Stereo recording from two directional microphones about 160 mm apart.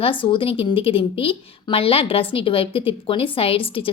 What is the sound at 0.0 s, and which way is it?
A woman's voice, 30° left (ahead or behind).